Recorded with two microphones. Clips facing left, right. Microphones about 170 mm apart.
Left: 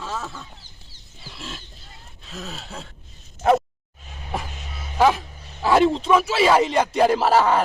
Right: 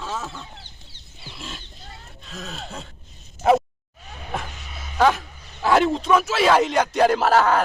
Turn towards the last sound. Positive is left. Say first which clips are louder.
# even
turn(degrees=5)  # may be behind; listen again after turning